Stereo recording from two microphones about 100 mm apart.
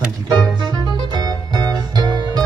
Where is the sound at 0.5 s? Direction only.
45° right (ahead or behind).